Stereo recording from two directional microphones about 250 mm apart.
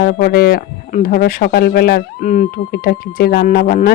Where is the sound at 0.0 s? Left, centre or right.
Left.